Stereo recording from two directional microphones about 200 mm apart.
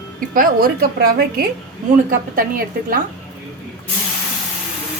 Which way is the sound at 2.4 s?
45° right (ahead or behind).